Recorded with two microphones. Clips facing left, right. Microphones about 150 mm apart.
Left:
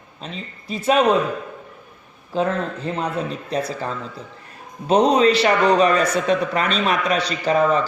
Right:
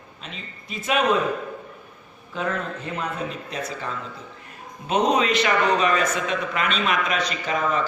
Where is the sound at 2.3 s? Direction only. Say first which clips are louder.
Left 6 dB; 30° left (ahead or behind).